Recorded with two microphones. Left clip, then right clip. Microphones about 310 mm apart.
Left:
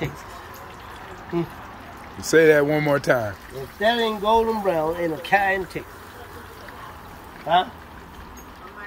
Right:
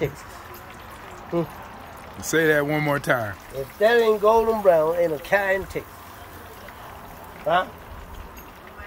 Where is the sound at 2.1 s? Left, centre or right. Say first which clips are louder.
Left 5 dB; centre.